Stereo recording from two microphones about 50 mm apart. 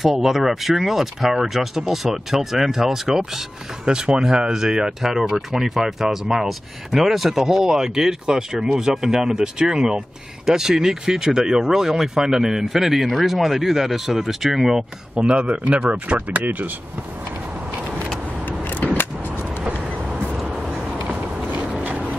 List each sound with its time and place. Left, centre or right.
0.0 s speech: centre
15.1 s speech: right
18.8 s vehicle: left
21.1 s vehicle: right